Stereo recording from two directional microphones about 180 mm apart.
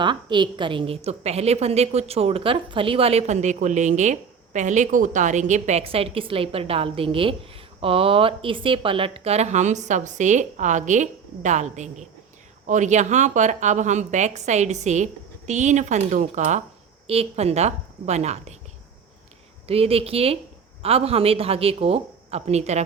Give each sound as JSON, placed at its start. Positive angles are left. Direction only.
{"t": 0.0, "sound": "a woman's voice", "side_deg": -25}
{"t": 19.6, "sound": "a woman's voice", "side_deg": -35}